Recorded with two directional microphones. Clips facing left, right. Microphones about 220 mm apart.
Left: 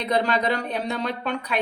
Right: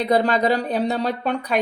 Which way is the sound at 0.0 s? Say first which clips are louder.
Right 4 dB; 35° right (ahead or behind).